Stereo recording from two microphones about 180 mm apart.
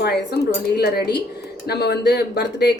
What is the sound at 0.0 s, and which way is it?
Speech, 65° left (ahead or behind).